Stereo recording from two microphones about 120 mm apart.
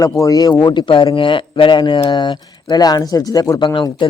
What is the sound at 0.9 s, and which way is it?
Speech, 45° left (ahead or behind).